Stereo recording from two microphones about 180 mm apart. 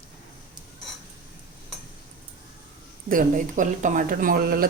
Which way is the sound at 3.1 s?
45° right (ahead or behind).